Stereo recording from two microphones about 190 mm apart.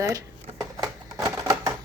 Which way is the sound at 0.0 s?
15° right (ahead or behind).